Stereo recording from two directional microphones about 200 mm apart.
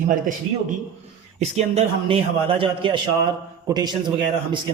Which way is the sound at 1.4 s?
30° right (ahead or behind).